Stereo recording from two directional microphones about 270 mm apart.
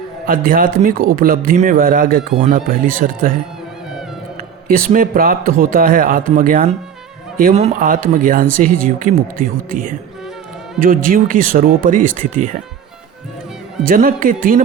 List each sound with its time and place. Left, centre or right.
0.3 s speech: right
4.4 s a man's voice: right
13.8 s speech: right